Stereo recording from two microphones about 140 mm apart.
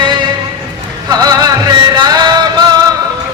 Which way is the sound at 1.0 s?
25° right (ahead or behind).